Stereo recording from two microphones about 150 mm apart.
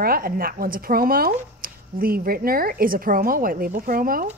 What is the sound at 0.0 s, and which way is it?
A woman's voice, 80° right.